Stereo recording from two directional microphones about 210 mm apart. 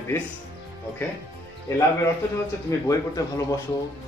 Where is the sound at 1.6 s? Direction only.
15° left (ahead or behind).